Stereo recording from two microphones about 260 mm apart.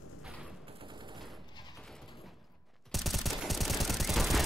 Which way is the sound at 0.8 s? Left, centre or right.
Centre.